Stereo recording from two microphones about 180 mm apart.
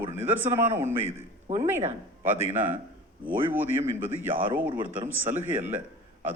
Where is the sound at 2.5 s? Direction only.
10° right (ahead or behind).